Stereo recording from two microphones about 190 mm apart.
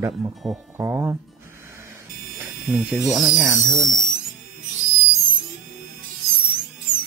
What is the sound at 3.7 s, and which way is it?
Speech, 15° right (ahead or behind).